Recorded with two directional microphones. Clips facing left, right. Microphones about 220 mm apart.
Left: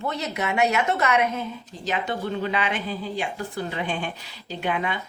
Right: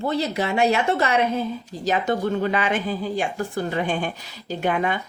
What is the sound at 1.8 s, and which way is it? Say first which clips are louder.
A woman's voice: right 5 dB; 45° right (ahead or behind).